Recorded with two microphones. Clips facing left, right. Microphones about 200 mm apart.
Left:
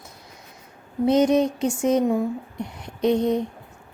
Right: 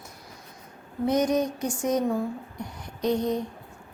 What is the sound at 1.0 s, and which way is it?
A woman's voice, 25° left (ahead or behind).